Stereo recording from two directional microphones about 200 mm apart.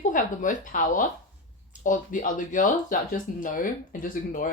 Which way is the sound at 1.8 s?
40° left (ahead or behind).